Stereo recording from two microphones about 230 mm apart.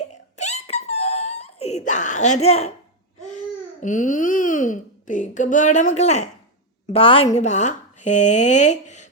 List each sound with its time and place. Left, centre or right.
0.0 s wail: left
3.2 s babbling: left
6.8 s speech: left